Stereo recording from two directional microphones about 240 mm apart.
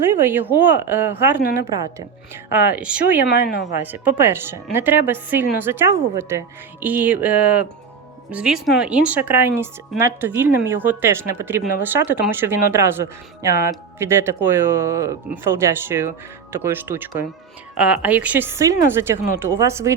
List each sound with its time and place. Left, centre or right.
0.2 s speech: centre
3.2 s speech: left
3.7 s speech: centre